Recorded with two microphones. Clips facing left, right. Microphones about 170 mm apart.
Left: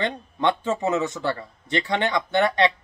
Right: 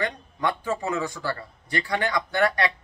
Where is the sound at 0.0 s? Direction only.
25° left (ahead or behind).